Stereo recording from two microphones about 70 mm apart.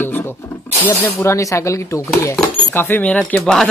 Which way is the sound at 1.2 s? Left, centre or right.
Left.